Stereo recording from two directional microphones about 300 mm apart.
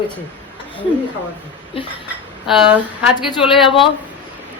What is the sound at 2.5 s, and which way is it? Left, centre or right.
Speech, centre.